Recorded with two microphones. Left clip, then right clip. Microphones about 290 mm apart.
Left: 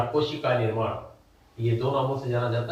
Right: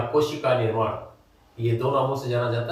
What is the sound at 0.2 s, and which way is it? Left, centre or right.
Speech, centre.